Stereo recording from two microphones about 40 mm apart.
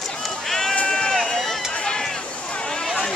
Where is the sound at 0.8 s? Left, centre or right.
Centre.